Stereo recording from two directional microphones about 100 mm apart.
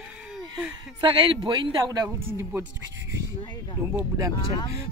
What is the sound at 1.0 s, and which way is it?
Speech, 50° right (ahead or behind).